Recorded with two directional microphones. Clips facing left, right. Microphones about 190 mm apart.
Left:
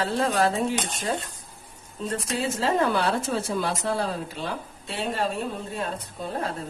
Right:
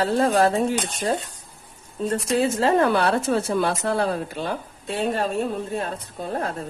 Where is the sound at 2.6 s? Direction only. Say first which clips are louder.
Right 2 dB; 60° right (ahead or behind).